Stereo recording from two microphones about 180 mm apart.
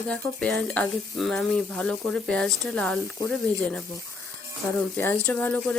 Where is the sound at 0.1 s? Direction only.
5° left (ahead or behind).